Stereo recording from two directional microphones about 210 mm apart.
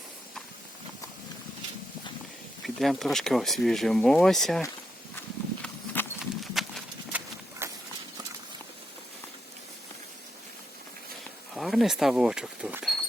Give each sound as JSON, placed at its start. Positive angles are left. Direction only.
{"t": 2.6, "sound": "speech", "side_deg": 0}
{"t": 5.6, "sound": "clip-clop", "side_deg": 5}
{"t": 7.6, "sound": "clip-clop", "side_deg": -10}
{"t": 11.5, "sound": "speech", "side_deg": 0}